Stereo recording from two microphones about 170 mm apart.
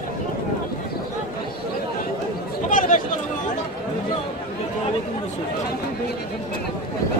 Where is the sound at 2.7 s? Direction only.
50° left (ahead or behind).